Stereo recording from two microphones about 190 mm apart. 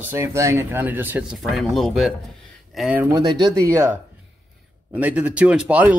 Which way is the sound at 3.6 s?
15° right (ahead or behind).